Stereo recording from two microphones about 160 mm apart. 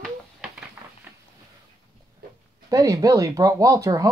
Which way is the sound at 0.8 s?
15° right (ahead or behind).